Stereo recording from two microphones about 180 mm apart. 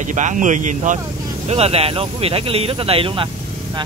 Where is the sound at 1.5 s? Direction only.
35° right (ahead or behind).